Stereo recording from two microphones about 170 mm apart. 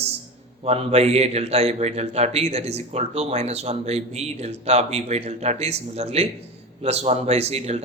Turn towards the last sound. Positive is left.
turn(degrees=-40)  # may be behind; listen again after turning